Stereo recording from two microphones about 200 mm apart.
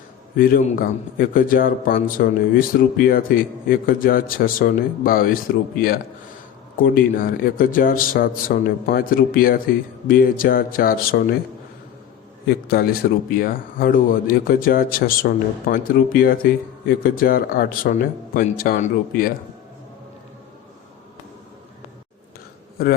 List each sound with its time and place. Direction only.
0.3 s speech: 45° left (ahead or behind)
12.5 s speech: 50° left (ahead or behind)
22.8 s speech: 50° left (ahead or behind)